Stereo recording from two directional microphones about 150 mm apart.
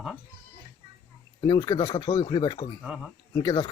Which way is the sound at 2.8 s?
5° right (ahead or behind).